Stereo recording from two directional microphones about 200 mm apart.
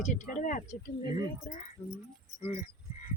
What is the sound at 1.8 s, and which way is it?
Speech, 10° left (ahead or behind).